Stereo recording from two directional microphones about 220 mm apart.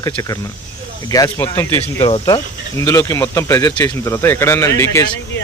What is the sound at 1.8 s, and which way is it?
Speech, 30° left (ahead or behind).